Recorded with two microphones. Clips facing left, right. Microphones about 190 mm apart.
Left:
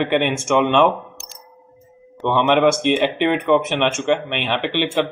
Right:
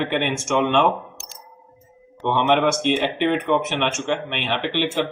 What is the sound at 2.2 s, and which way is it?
A man's voice, 60° left (ahead or behind).